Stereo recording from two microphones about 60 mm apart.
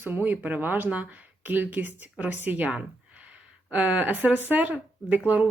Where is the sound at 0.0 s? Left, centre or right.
Right.